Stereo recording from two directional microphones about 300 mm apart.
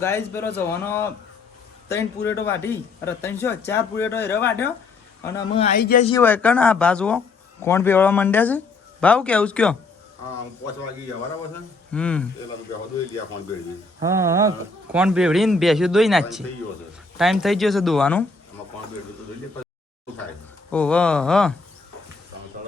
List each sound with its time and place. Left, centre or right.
0.0 s speech: centre
2.2 s a man's voice: centre; by 6.1 s left
6.1 s speech: centre
11.9 s speech: centre
14.0 s a sound: centre
14.9 s speech: centre
20.7 s speech: centre